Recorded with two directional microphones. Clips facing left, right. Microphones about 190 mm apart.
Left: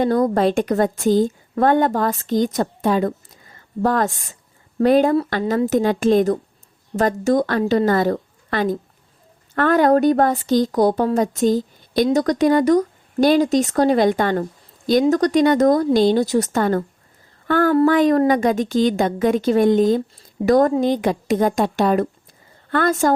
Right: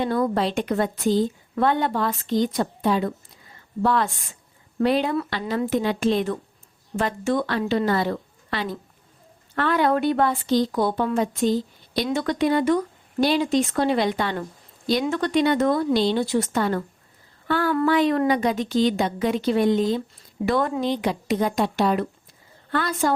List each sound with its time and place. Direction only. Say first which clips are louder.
0.0 s a woman's voice: left 6 dB; 45° left (ahead or behind)